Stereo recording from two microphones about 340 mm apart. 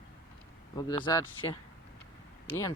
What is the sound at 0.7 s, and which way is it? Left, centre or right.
Speech, centre.